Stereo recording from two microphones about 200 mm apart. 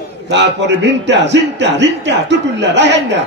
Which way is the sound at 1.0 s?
60° right (ahead or behind).